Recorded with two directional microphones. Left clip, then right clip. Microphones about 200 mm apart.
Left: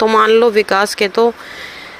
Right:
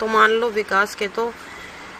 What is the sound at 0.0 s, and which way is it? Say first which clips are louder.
Speech: left 7 dB; 40° left (ahead or behind).